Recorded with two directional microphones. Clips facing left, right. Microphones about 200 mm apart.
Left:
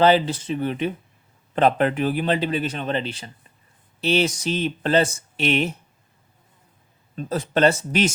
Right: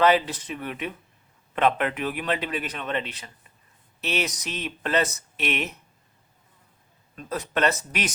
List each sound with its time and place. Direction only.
0.0 s speech: 30° left (ahead or behind)
7.2 s speech: 30° left (ahead or behind)